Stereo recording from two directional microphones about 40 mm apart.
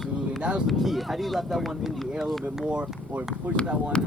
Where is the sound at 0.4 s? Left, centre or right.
Right.